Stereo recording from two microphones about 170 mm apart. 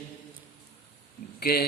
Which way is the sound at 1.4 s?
65° left (ahead or behind).